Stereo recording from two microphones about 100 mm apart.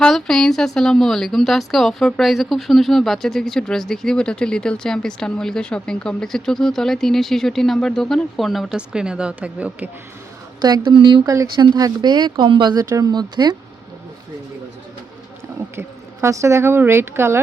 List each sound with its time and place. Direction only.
0.0 s a woman's voice: 5° left (ahead or behind); by 9.9 s 15° right (ahead or behind)
10.6 s speech: 45° right (ahead or behind)
15.7 s a woman's voice: 25° right (ahead or behind)